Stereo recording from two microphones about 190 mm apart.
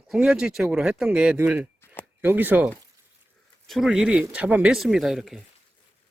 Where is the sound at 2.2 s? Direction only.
10° right (ahead or behind).